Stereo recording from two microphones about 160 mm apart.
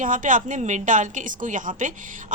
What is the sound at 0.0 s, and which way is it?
A woman's voice, 55° right (ahead or behind).